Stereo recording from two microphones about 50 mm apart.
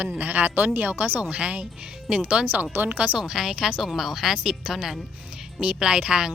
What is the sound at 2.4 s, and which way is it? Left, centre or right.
Speech, right.